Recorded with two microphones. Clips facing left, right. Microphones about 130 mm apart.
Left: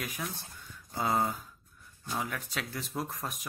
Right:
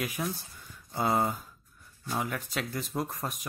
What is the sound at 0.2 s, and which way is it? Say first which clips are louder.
Speech: right 6 dB; 25° right (ahead or behind).